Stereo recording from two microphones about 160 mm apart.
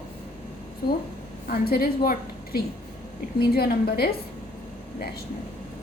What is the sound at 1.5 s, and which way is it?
A woman's voice, 70° left (ahead or behind).